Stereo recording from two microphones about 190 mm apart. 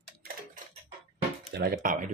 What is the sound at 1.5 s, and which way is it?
Speech, 55° right (ahead or behind).